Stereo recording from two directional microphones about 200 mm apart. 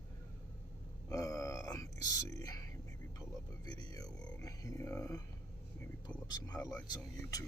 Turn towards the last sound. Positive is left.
turn(degrees=20)  # may be behind; listen again after turning